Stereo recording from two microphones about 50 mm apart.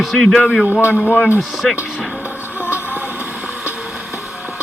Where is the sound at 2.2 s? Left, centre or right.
Right.